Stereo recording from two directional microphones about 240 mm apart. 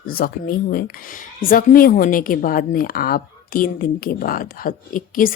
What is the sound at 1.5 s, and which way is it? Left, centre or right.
A woman's voice, left.